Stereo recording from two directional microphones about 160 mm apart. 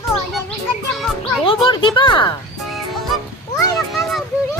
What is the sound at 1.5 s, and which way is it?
Speech, 30° left (ahead or behind).